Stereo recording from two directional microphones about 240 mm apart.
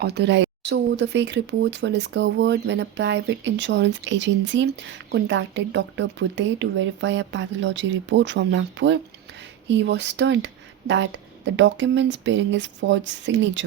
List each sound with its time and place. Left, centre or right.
0.0 s speech: right